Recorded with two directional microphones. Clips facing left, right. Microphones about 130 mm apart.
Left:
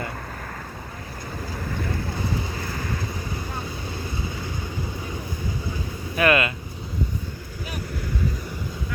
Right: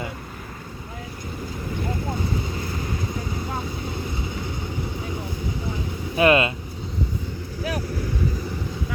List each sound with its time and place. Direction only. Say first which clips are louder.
6.1 s speech: right 3 dB; 25° right (ahead or behind)